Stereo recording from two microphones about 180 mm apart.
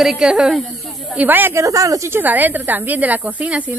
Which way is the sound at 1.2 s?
10° right (ahead or behind).